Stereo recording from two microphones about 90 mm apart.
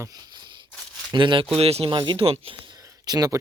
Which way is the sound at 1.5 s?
80° right.